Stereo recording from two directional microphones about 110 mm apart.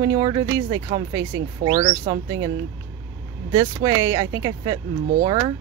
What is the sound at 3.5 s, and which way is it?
Speech, 35° right (ahead or behind).